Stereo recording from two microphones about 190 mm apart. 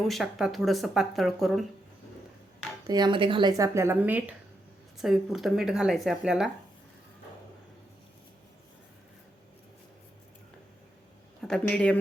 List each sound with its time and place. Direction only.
0.0 s speech: centre (ahead or behind)
2.8 s speech: 20° right (ahead or behind); by 6.5 s 5° right (ahead or behind)
11.4 s speech: 5° left (ahead or behind)